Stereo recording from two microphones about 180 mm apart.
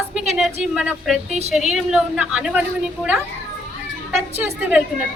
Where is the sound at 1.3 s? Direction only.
35° right (ahead or behind).